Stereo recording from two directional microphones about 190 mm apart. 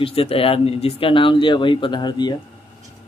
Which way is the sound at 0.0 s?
30° left (ahead or behind).